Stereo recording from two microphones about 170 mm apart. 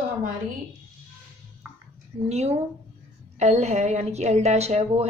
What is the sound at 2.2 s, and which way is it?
A woman's voice, 40° right (ahead or behind).